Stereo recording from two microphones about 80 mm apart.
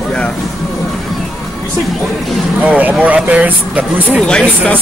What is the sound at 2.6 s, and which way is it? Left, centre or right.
Speech, centre.